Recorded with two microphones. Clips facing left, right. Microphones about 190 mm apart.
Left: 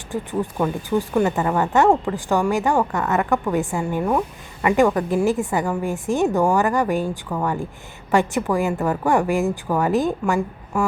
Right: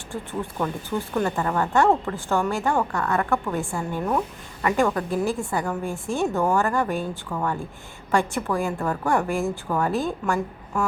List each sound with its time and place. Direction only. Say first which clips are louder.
0.1 s speech: left 6 dB; 15° left (ahead or behind)